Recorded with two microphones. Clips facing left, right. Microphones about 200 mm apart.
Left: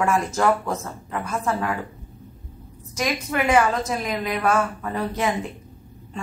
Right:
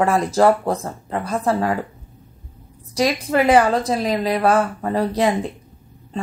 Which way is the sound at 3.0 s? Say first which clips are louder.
Right 6 dB; 35° right (ahead or behind).